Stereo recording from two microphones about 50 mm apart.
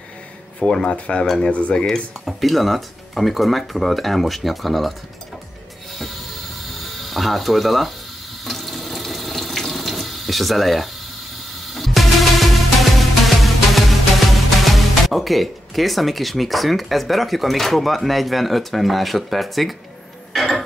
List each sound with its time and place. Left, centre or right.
0.8 s speech: left
1.2 s speech: centre
1.5 s speech: left
2.2 s speech: centre
6.8 s ratchet: centre
8.5 s water tap: centre
11.7 s music: centre